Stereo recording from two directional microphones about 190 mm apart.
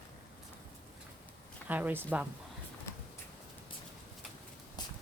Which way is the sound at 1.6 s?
10° right (ahead or behind).